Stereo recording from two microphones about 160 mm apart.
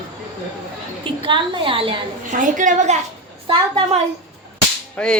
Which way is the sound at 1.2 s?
30° right (ahead or behind).